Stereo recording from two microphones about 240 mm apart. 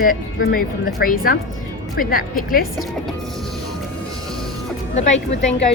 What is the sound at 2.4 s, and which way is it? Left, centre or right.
Speech, left.